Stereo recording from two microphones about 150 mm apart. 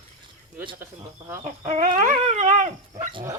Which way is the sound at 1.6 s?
55° right (ahead or behind).